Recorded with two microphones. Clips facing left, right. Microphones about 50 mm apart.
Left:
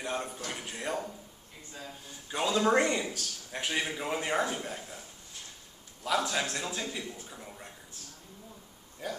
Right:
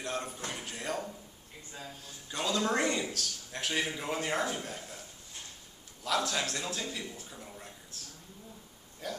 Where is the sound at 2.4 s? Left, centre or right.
Centre.